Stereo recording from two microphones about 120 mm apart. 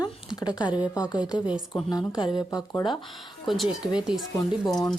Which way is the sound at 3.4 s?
Centre (ahead or behind).